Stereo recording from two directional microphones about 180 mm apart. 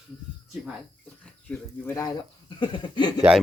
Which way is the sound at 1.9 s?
25° left (ahead or behind).